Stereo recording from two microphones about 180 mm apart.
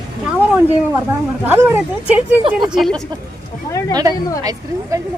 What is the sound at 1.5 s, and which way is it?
Speech, 10° right (ahead or behind).